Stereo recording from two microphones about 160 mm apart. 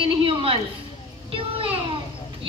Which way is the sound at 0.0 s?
35° right (ahead or behind).